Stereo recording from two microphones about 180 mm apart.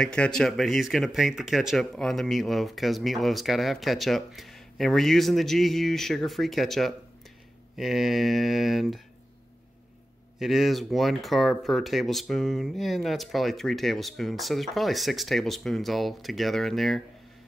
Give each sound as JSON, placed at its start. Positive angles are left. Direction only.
{"t": 0.0, "sound": "speech", "side_deg": 5}
{"t": 10.4, "sound": "speech", "side_deg": 0}